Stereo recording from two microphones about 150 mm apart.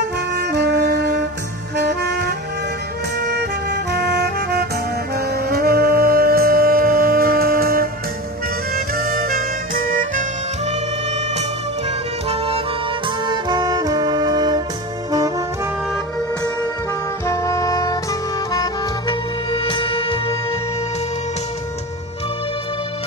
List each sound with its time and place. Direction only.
0.3 s saxophone: 90° right
1.8 s music: 90° right; by 9.4 s 70° right (ahead or behind)
12.3 s music: 40° right (ahead or behind)
13.3 s saxophone: 30° right (ahead or behind)
15.0 s music: 25° right (ahead or behind)
17.3 s brass instrument: 20° left (ahead or behind)
18.5 s music: 25° left (ahead or behind)
19.5 s music: 35° left (ahead or behind)